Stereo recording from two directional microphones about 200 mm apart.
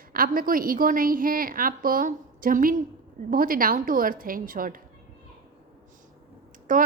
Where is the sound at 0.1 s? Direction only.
45° right (ahead or behind).